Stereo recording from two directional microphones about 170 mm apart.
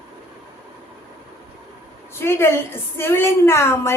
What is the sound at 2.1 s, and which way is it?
Speech, 15° left (ahead or behind).